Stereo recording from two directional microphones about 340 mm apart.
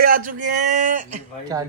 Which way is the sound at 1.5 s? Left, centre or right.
Centre.